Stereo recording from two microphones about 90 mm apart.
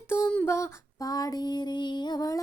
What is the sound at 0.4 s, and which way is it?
Female singing, 35° left (ahead or behind).